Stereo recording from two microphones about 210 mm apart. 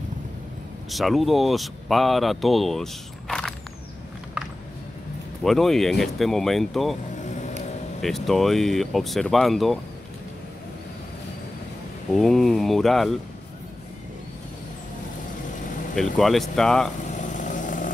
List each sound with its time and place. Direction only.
0.8 s speech: centre (ahead or behind)
5.4 s speech: centre (ahead or behind)
7.2 s vehicle: 35° left (ahead or behind)
8.0 s speech: centre (ahead or behind)
12.1 s speech: centre (ahead or behind)
16.0 s speech: centre (ahead or behind)
17.0 s vehicle: 35° left (ahead or behind)